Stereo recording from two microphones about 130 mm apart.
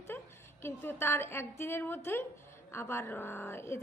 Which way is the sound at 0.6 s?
15° left (ahead or behind).